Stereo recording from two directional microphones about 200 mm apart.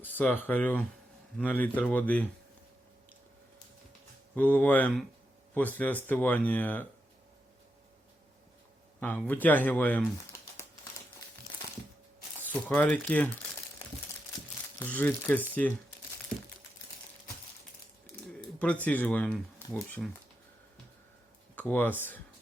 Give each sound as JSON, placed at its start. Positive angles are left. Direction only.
{"t": 0.0, "sound": "a man's voice", "side_deg": 10}
{"t": 4.4, "sound": "a man's voice", "side_deg": 10}
{"t": 9.0, "sound": "a man's voice", "side_deg": 10}
{"t": 12.4, "sound": "speech", "side_deg": 10}
{"t": 14.8, "sound": "a man's voice", "side_deg": 10}
{"t": 18.3, "sound": "speech", "side_deg": 5}
{"t": 21.5, "sound": "speech", "side_deg": 10}